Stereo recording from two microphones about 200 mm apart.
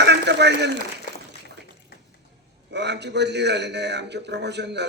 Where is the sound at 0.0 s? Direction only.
60° right (ahead or behind).